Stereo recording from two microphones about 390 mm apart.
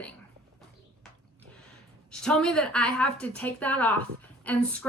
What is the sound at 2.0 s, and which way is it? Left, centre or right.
A woman's voice, centre.